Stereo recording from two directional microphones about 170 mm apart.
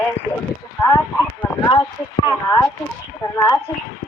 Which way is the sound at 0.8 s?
20° left (ahead or behind).